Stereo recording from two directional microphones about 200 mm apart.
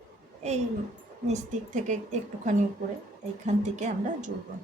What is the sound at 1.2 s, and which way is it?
Speech, 35° right (ahead or behind).